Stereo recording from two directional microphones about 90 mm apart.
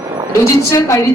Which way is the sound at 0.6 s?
35° left (ahead or behind).